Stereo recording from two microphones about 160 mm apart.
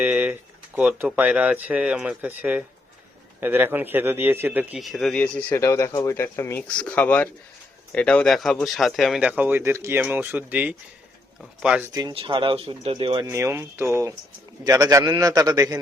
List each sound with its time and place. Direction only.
0.0 s speech: 10° right (ahead or behind)
4.8 s speech: centre (ahead or behind)
12.1 s speech: 35° right (ahead or behind)
13.2 s a man's voice: 15° right (ahead or behind)